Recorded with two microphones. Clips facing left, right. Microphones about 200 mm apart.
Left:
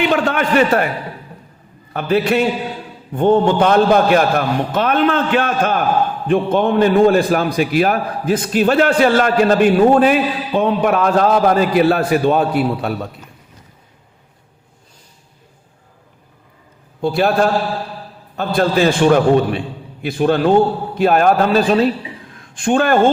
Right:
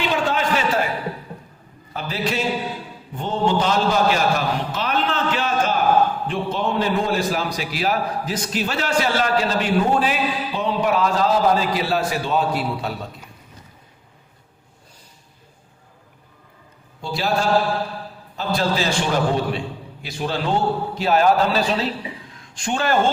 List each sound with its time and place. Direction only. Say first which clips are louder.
0.0 s a sound: left 5 dB; 60° left (ahead or behind)
1.9 s a man's voice: left 10 dB; 60° left (ahead or behind)
17.0 s a man's voice: left 8 dB; 55° left (ahead or behind)